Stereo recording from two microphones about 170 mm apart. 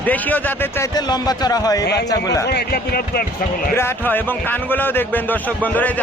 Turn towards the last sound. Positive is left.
turn(degrees=10)  # may be behind; listen again after turning